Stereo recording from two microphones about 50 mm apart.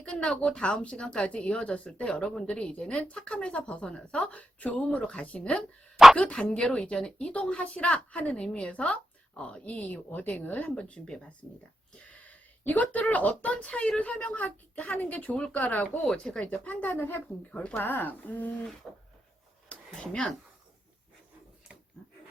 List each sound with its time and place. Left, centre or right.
0.0 s speech: centre; by 10.7 s left
10.7 s speech: left
12.3 s speech: left
16.2 s speech: centre
16.6 s speech: left
17.5 s speech: left
17.7 s speech: left
18.8 s a sound: centre
19.6 s a sound: left